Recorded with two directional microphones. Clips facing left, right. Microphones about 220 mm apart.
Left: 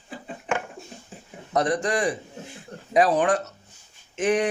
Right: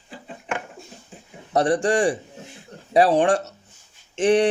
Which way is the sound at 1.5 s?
30° right (ahead or behind).